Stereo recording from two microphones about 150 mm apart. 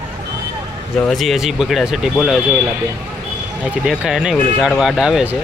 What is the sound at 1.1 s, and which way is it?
Speech, centre (ahead or behind).